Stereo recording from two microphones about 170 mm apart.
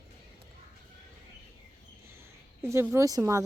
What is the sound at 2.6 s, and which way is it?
Speech, 15° right (ahead or behind).